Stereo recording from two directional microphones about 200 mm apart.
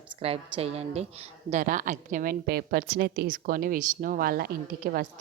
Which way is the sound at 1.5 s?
40° right (ahead or behind).